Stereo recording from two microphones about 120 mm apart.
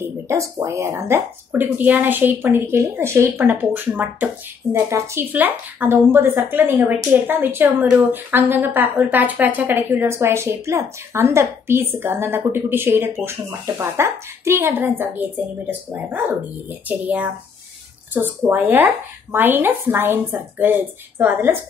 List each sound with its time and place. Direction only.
0.0 s a woman's voice: 25° right (ahead or behind)